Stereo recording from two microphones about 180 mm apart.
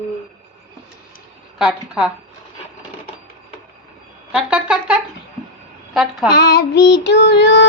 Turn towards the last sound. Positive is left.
turn(degrees=80)